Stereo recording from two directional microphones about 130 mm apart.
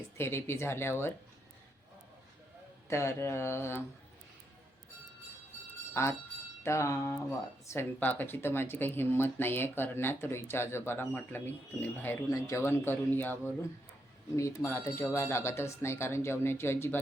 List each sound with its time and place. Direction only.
0.2 s speech: 20° left (ahead or behind)
2.9 s speech: 20° left (ahead or behind)
5.9 s speech: 20° left (ahead or behind)
14.3 s speech: 25° left (ahead or behind)